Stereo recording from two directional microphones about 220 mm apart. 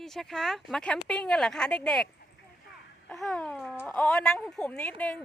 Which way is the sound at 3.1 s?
5° left (ahead or behind).